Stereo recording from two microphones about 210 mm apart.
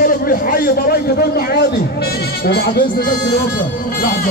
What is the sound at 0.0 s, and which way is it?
A man's voice, 45° left (ahead or behind).